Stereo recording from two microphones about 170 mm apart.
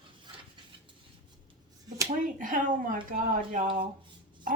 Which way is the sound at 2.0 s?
50° right (ahead or behind).